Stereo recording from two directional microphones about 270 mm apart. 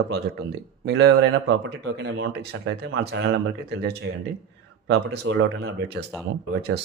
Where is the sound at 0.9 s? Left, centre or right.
Right.